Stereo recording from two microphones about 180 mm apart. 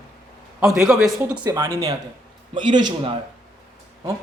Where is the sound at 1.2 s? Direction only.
20° right (ahead or behind).